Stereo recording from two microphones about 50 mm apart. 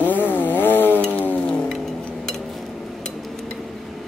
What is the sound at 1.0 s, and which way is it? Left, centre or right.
Vehicle, left.